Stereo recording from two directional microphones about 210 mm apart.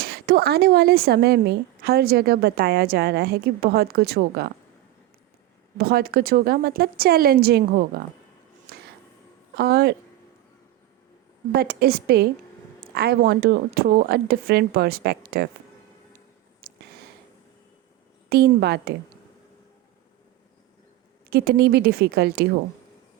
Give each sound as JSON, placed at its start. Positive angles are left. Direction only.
{"t": 0.0, "sound": "speech", "side_deg": -50}
{"t": 5.7, "sound": "speech", "side_deg": -45}
{"t": 8.7, "sound": "a sound", "side_deg": -50}
{"t": 9.6, "sound": "speech", "side_deg": -50}
{"t": 11.5, "sound": "speech", "side_deg": -50}
{"t": 16.6, "sound": "a sound", "side_deg": -45}
{"t": 18.3, "sound": "speech", "side_deg": -50}
{"t": 21.2, "sound": "speech", "side_deg": -50}